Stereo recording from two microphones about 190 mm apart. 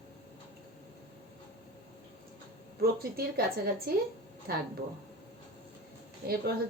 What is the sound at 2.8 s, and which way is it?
A woman's voice, 55° right (ahead or behind).